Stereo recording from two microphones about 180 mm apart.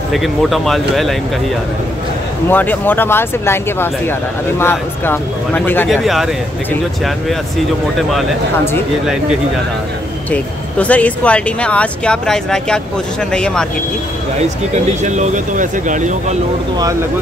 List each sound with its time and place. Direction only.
0.1 s speech: centre (ahead or behind)
2.5 s speech: 10° left (ahead or behind)
5.9 s speech: centre (ahead or behind)
9.0 s speech: 5° right (ahead or behind)
10.3 s speech: 10° left (ahead or behind)
15.0 s speech: 40° right (ahead or behind)